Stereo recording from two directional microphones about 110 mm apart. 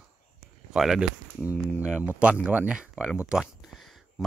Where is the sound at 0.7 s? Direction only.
5° right (ahead or behind).